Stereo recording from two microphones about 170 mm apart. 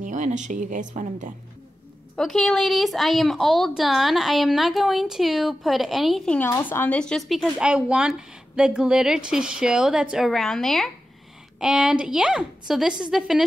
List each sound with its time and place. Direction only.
0.0 s speech: 45° right (ahead or behind)
2.1 s a woman's voice: centre (ahead or behind)